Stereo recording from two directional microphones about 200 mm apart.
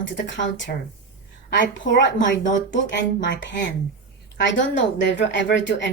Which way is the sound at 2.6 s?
60° left (ahead or behind).